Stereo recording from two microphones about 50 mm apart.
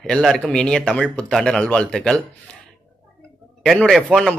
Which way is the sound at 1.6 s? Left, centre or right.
Centre.